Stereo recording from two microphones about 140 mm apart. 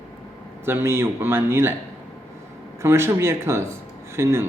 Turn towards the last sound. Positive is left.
turn(degrees=-20)  # may be behind; listen again after turning